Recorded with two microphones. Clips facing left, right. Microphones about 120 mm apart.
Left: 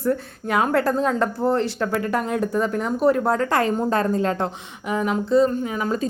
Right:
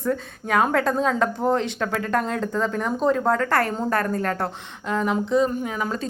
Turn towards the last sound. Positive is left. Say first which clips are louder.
# left 2 dB
turn(degrees=5)  # may be behind; listen again after turning